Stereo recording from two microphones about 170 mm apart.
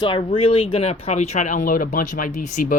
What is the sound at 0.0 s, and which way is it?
Speech, 30° left (ahead or behind).